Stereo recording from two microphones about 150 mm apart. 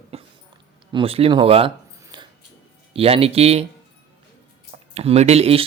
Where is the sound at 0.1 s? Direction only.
40° right (ahead or behind).